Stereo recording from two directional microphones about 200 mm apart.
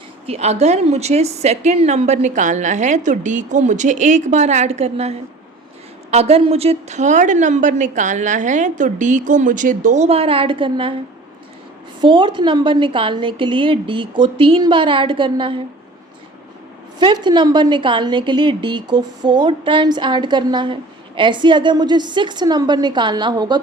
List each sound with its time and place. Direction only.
0.3 s a woman's voice: 30° right (ahead or behind)
11.9 s a woman's voice: 25° right (ahead or behind)
17.0 s a woman's voice: 25° right (ahead or behind)